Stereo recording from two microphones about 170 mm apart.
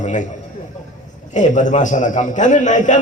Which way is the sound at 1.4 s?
45° left (ahead or behind).